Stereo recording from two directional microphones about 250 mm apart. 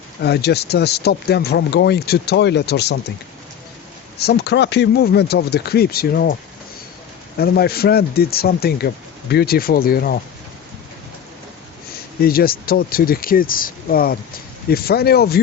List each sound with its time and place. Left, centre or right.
0.2 s speech: left
4.2 s speech: left
7.3 s speech: left
12.2 s speech: left